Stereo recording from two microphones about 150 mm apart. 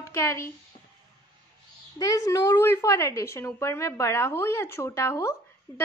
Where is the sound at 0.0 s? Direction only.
20° left (ahead or behind).